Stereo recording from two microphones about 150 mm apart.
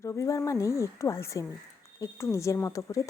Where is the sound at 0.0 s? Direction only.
20° left (ahead or behind).